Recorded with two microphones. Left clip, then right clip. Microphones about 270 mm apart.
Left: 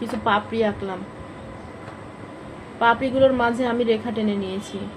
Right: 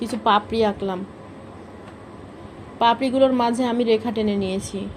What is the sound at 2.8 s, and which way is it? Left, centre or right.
A woman's voice, right.